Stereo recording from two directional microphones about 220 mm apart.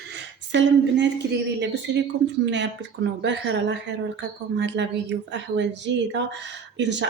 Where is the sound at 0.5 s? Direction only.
50° right (ahead or behind).